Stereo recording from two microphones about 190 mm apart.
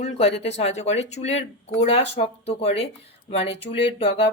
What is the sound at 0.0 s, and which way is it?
Speech, 35° left (ahead or behind).